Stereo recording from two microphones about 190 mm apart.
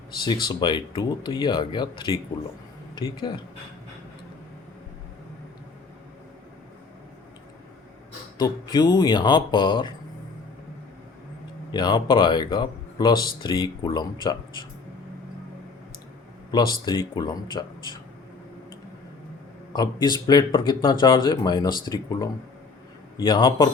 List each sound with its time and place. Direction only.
0.2 s speech: 25° left (ahead or behind)
8.4 s speech: 20° left (ahead or behind)
11.7 s speech: 25° left (ahead or behind)
16.5 s speech: 20° left (ahead or behind)
19.7 s speech: 20° left (ahead or behind)